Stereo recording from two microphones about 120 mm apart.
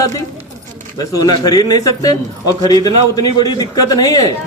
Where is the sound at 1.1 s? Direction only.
35° left (ahead or behind).